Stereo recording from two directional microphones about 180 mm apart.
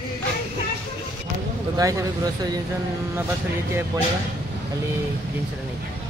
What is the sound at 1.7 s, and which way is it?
Speech, 20° right (ahead or behind).